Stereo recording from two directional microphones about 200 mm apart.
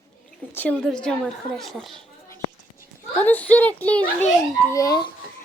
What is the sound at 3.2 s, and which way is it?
A child's voice, 10° left (ahead or behind).